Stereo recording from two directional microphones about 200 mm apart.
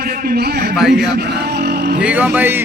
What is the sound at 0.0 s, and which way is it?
Speech, 50° right (ahead or behind).